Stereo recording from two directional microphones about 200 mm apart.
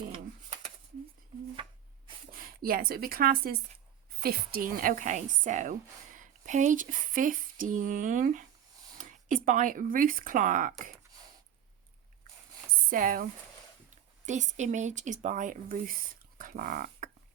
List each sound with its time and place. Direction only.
2.3 s a woman's voice: 45° right (ahead or behind)
12.9 s speech: 45° right (ahead or behind)